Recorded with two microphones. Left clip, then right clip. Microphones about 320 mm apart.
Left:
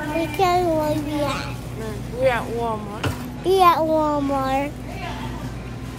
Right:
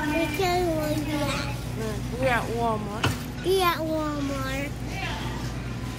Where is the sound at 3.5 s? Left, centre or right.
Centre.